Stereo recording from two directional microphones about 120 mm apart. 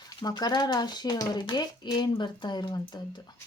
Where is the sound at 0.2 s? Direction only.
35° left (ahead or behind).